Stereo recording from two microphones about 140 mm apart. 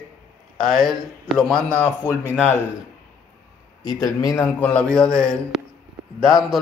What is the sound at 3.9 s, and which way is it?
A man's voice, 25° left (ahead or behind).